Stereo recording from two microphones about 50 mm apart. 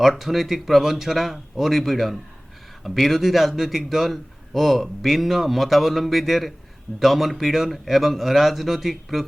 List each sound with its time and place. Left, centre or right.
0.0 s a man's voice: centre